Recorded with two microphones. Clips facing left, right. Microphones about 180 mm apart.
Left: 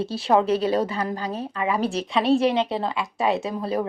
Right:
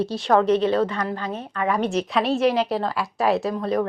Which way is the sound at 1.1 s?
35° left (ahead or behind).